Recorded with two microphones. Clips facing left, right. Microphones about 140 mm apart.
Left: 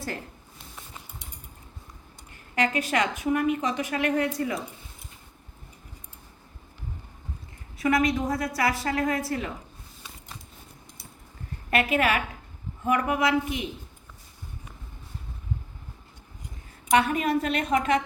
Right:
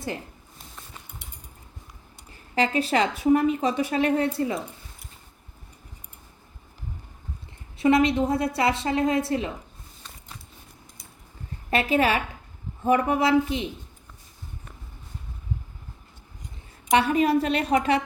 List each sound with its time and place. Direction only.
2.6 s a woman's voice: 30° right (ahead or behind)
7.8 s a woman's voice: 25° right (ahead or behind)
11.7 s a woman's voice: 30° right (ahead or behind)
16.9 s a woman's voice: 30° right (ahead or behind)